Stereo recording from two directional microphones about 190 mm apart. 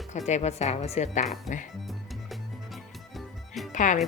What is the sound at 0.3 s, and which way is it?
Speech, 35° left (ahead or behind).